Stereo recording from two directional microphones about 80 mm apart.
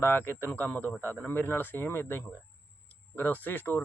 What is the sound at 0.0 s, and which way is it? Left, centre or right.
A man's voice, left.